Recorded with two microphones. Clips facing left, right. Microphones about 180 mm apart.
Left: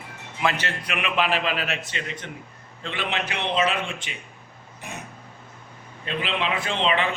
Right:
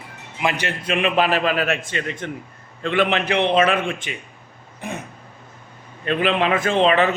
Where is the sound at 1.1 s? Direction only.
40° right (ahead or behind).